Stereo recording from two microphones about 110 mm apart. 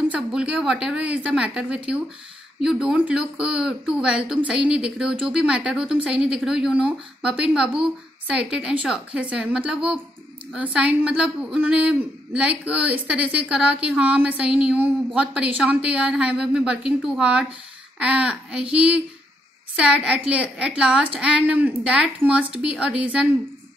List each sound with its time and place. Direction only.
0.1 s speech: 5° right (ahead or behind)